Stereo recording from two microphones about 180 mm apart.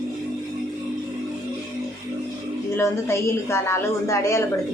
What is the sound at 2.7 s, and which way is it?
A woman's voice, 15° left (ahead or behind).